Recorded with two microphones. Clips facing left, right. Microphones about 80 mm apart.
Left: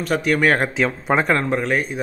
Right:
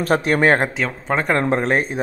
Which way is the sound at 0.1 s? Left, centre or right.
Right.